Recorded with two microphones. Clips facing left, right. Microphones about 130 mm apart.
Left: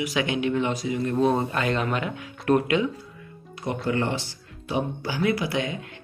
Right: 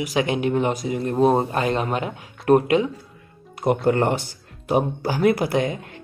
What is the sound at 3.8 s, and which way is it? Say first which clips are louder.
Speech: right 3 dB; 50° right (ahead or behind).